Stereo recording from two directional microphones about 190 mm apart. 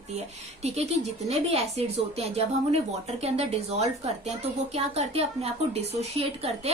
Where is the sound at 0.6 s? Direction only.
35° right (ahead or behind).